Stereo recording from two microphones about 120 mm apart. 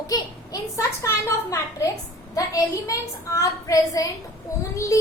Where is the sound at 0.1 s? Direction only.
30° left (ahead or behind).